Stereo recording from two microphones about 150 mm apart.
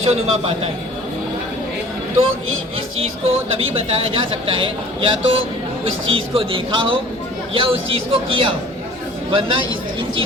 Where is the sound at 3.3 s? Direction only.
40° right (ahead or behind).